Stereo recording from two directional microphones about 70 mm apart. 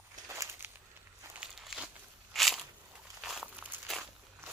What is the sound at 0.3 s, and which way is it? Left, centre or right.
Walk, right.